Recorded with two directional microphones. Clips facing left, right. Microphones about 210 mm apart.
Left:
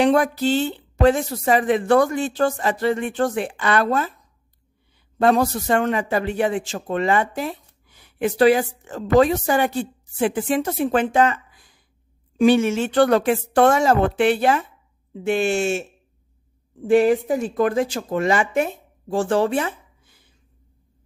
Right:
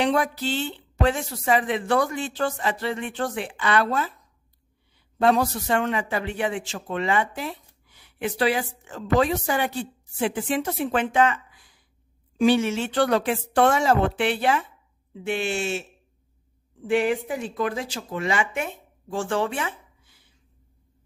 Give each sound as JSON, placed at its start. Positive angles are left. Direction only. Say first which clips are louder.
{"t": 0.0, "sound": "a man's voice", "louder": "left 6 dB", "side_deg": 45}
{"t": 5.2, "sound": "a man's voice", "louder": "left 3 dB", "side_deg": 45}
{"t": 12.4, "sound": "a man's voice", "louder": "left 4 dB", "side_deg": 50}